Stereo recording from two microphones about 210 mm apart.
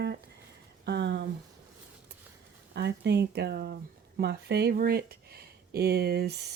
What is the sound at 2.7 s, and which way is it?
Speech, 55° right (ahead or behind).